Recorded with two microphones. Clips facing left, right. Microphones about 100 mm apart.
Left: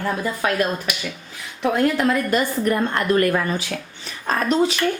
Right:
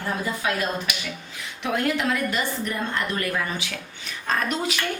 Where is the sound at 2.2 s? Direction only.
45° left (ahead or behind).